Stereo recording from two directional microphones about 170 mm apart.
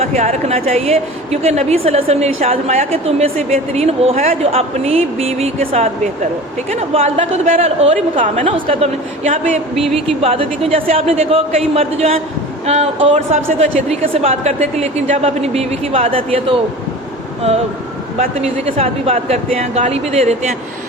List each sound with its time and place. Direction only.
0.0 s a woman's voice: 40° right (ahead or behind)
9.8 s a woman's voice: 35° right (ahead or behind)
18.2 s a woman's voice: 40° right (ahead or behind)